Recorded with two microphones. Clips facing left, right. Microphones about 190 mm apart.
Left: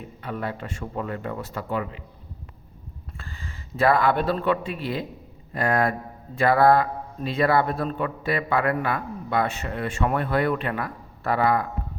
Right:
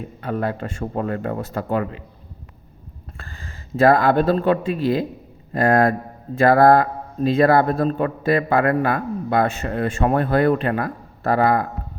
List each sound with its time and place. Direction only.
0.2 s a man's voice: 45° right (ahead or behind)
3.8 s a man's voice: 40° right (ahead or behind)